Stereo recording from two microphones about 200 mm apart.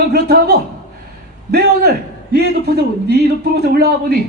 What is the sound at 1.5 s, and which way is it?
A man's voice, 55° right (ahead or behind).